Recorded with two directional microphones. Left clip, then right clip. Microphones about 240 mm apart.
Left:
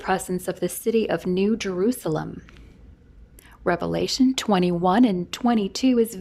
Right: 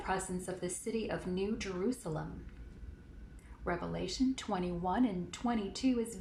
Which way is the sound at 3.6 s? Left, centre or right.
Left.